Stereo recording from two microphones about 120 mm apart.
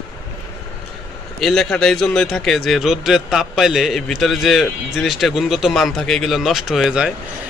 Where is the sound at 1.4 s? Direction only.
Centre (ahead or behind).